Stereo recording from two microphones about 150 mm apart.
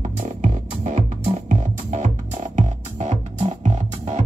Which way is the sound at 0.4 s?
60° right (ahead or behind).